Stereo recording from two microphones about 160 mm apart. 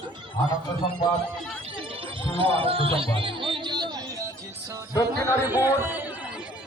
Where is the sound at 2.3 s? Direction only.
35° right (ahead or behind).